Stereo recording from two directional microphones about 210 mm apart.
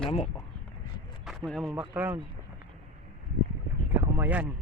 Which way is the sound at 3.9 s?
10° right (ahead or behind).